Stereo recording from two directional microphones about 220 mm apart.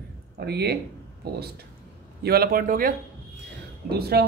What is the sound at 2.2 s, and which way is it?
Speech, 45° right (ahead or behind).